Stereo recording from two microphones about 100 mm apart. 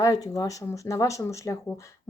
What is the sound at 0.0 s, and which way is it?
A woman's voice, 35° left (ahead or behind).